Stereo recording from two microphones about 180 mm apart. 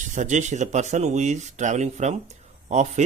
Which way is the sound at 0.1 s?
45° right (ahead or behind).